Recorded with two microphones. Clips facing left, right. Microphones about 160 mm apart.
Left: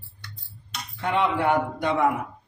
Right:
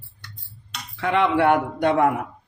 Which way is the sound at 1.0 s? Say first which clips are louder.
Right 4 dB; 85° right.